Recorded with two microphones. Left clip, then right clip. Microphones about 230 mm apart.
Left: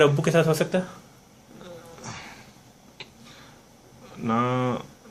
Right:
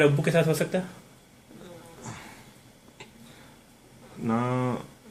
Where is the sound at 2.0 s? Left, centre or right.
Centre.